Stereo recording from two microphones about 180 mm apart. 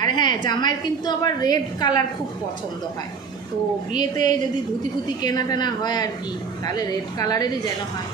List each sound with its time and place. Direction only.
0.0 s a sound: 25° left (ahead or behind)
0.5 s a woman's voice: 25° left (ahead or behind)
3.9 s a woman's voice: 25° left (ahead or behind)